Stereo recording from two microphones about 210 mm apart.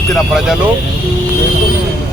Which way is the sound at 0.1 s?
Centre (ahead or behind).